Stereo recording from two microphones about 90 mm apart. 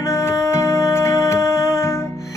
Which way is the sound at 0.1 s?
30° left (ahead or behind).